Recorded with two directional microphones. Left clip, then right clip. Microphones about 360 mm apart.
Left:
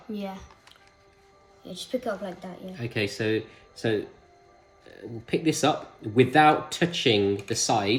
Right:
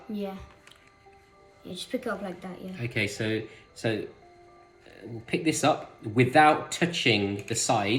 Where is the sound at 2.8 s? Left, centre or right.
Centre.